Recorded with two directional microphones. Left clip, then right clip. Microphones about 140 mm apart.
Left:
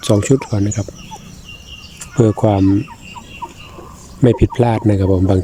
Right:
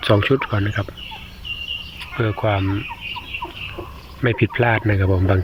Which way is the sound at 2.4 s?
40° left (ahead or behind).